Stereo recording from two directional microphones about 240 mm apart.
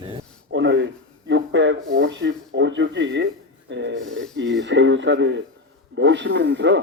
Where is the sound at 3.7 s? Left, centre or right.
Right.